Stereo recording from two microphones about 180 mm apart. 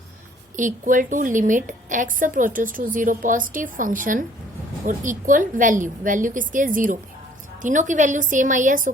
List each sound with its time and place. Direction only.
0.5 s a woman's voice: 45° right (ahead or behind)